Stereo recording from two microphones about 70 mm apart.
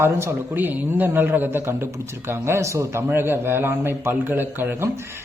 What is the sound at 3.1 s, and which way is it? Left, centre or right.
Speech, right.